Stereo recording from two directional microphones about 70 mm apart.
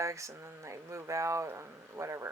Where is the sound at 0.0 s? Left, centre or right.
Right.